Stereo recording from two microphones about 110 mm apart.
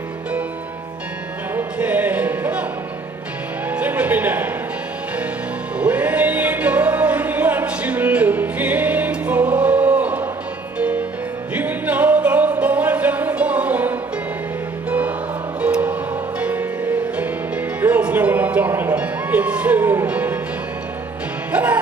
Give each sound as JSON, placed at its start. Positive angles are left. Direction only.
{"t": 1.5, "sound": "music", "side_deg": -15}
{"t": 3.7, "sound": "music", "side_deg": -15}
{"t": 5.8, "sound": "music", "side_deg": -15}
{"t": 21.5, "sound": "music", "side_deg": -15}